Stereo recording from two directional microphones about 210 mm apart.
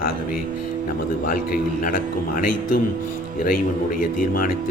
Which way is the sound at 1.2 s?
40° left (ahead or behind).